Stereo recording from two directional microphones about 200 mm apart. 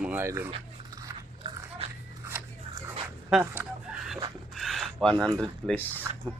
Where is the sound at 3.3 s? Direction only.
5° right (ahead or behind).